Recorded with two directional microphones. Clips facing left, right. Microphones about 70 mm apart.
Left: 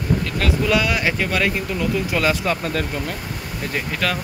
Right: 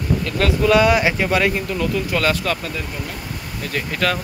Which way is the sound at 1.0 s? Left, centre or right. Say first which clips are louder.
Right 3 dB; centre.